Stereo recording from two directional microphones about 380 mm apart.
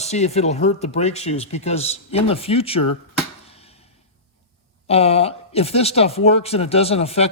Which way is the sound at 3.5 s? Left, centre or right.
Centre.